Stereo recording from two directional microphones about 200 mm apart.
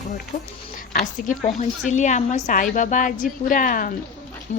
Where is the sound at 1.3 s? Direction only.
35° left (ahead or behind).